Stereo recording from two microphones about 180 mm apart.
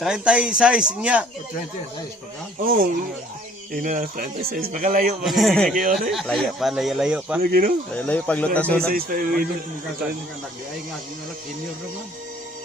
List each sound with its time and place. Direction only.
0.0 s speech: 5° right (ahead or behind)
3.8 s speech: 50° right (ahead or behind)
5.2 s speech: centre (ahead or behind)
5.7 s speech: 50° right (ahead or behind)
6.1 s speech: centre (ahead or behind)
7.4 s speech: 55° right (ahead or behind)
7.9 s speech: 5° left (ahead or behind)
8.9 s speech: 55° right (ahead or behind)